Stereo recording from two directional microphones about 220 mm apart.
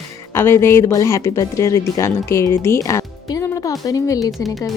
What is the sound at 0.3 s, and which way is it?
Speech, 10° left (ahead or behind).